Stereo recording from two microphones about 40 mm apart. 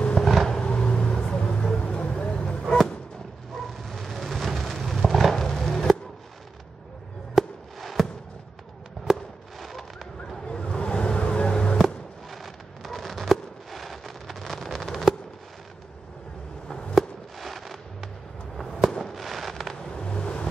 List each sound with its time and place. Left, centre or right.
0.1 s vehicle: centre
0.5 s vehicle: left
3.5 s a sound: centre
7.3 s fireworks: centre
9.1 s fireworks: centre
10.4 s vehicle: left
11.8 s fireworks: centre
16.9 s fireworks: centre
19.8 s vehicle: left